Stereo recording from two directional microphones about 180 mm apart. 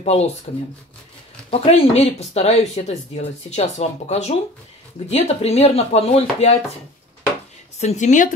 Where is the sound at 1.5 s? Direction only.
35° left (ahead or behind).